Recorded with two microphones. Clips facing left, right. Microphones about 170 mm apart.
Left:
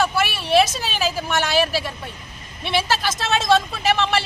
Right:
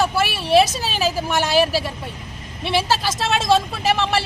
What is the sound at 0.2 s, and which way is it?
A woman's voice, 35° right (ahead or behind).